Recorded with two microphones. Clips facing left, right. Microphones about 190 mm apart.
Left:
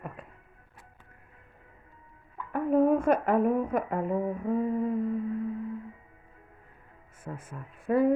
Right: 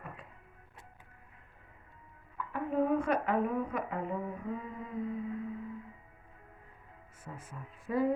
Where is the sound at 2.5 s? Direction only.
50° left (ahead or behind).